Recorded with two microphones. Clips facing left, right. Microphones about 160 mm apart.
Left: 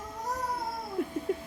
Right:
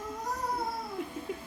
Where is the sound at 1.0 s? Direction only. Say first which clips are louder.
Left 9 dB; 50° left (ahead or behind).